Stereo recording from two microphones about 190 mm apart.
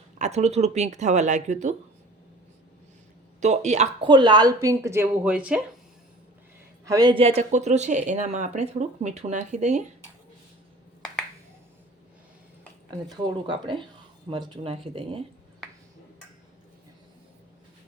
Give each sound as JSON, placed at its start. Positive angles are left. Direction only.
{"t": 0.2, "sound": "speech", "side_deg": -35}
{"t": 3.4, "sound": "speech", "side_deg": -35}
{"t": 4.1, "sound": "speech", "side_deg": -25}
{"t": 6.8, "sound": "speech", "side_deg": -20}
{"t": 13.1, "sound": "speech", "side_deg": -25}